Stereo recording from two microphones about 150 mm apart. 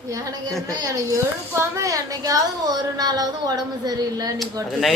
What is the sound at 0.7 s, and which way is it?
Speech, 25° right (ahead or behind).